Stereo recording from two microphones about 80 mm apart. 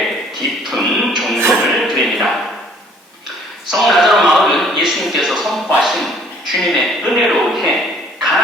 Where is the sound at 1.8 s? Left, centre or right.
Centre.